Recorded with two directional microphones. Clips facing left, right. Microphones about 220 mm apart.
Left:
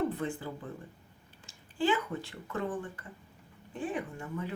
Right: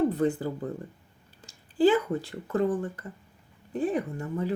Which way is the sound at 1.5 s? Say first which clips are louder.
Right 8 dB; 40° right (ahead or behind).